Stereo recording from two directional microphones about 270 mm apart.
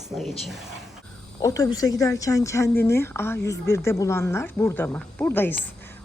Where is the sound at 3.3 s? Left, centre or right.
Left.